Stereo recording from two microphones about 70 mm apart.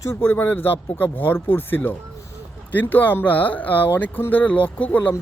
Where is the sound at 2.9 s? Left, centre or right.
Left.